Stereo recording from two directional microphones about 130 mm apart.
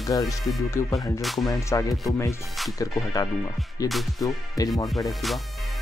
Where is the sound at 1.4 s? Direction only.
25° left (ahead or behind).